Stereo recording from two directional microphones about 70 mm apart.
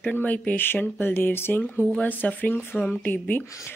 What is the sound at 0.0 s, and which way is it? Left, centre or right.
Speech, left.